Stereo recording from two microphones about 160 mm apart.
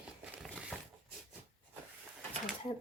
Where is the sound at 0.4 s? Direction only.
Centre (ahead or behind).